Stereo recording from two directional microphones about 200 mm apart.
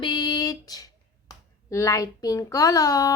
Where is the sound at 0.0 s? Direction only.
20° left (ahead or behind).